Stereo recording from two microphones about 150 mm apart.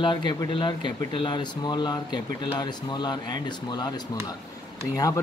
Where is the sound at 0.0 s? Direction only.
30° left (ahead or behind).